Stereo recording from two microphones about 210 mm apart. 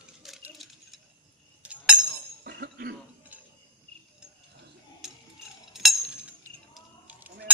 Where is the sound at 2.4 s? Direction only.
50° right (ahead or behind).